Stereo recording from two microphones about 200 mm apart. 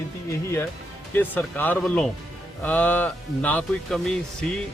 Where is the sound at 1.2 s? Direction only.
10° left (ahead or behind).